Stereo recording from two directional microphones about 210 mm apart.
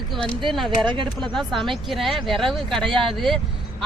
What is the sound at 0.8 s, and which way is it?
Speech, 20° right (ahead or behind).